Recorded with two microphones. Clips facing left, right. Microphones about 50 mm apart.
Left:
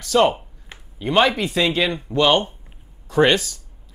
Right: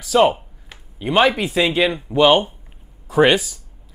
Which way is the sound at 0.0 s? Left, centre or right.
Centre.